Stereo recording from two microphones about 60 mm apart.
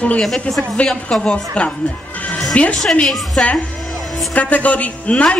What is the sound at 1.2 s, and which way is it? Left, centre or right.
A woman's voice, centre.